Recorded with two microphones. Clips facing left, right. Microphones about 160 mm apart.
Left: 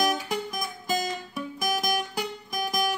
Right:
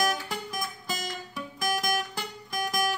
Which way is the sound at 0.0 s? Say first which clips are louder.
Left 3 dB; 15° left (ahead or behind).